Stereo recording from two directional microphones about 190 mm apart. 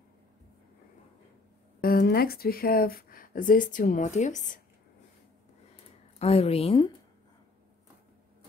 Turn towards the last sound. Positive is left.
turn(degrees=30)  # may be behind; listen again after turning